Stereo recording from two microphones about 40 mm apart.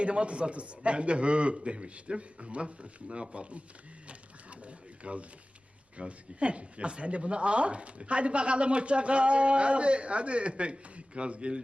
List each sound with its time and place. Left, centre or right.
0.0 s speech: right
4.0 s printer: right
6.0 s speech: right